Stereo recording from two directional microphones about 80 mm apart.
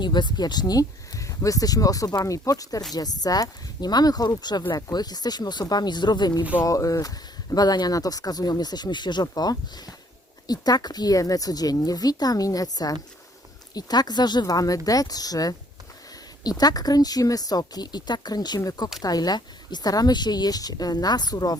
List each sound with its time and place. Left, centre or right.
0.0 s speech: left
2.2 s a woman's voice: left
6.7 s a woman's voice: left